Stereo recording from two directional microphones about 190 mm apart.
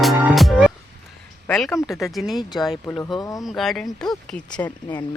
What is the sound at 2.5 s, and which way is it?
Speech, 20° left (ahead or behind).